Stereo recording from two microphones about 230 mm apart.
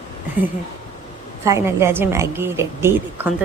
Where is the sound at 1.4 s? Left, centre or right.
Centre.